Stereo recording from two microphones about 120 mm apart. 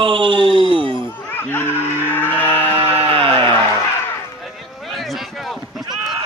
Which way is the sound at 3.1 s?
45° right (ahead or behind).